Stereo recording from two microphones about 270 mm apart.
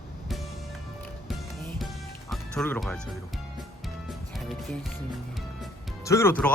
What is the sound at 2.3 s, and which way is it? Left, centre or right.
Speech, centre.